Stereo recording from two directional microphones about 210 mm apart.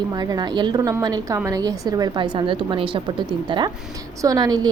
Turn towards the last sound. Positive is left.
turn(degrees=-20)  # may be behind; listen again after turning